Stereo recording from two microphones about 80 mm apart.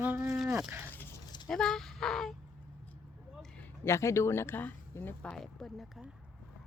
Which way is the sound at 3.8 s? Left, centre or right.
Left.